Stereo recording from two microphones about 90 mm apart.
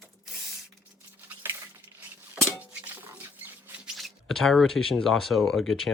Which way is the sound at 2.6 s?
20° right (ahead or behind).